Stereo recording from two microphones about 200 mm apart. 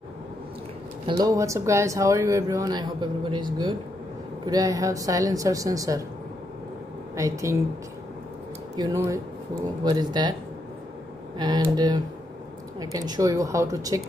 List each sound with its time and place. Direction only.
1.0 s speech: 20° right (ahead or behind)
7.2 s speech: 15° right (ahead or behind)
8.7 s speech: 15° right (ahead or behind)
11.3 s speech: 20° right (ahead or behind)